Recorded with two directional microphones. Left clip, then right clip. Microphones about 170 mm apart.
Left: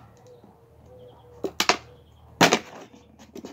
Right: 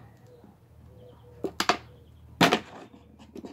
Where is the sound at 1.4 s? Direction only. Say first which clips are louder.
Left 4 dB; 5° right (ahead or behind).